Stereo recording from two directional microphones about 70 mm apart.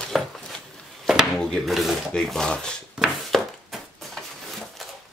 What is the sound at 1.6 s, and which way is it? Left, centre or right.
Speech, centre.